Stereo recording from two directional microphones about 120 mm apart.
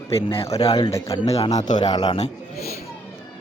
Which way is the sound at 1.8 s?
35° left (ahead or behind).